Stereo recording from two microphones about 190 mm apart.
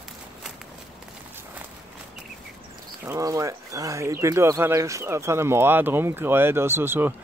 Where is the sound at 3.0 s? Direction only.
15° right (ahead or behind).